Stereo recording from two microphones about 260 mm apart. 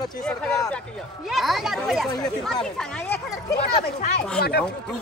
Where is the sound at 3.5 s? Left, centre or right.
Left.